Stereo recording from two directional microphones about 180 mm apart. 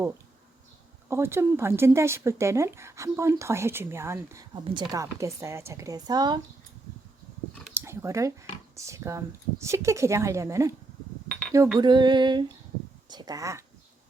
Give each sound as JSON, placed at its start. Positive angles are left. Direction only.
{"t": 1.0, "sound": "speech", "side_deg": -15}
{"t": 4.5, "sound": "a woman's voice", "side_deg": -25}
{"t": 7.7, "sound": "a sound", "side_deg": -15}
{"t": 8.7, "sound": "speech", "side_deg": -15}
{"t": 11.8, "sound": "a woman's voice", "side_deg": -25}